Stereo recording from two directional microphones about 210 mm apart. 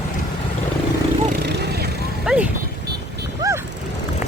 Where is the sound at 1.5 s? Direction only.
50° right (ahead or behind).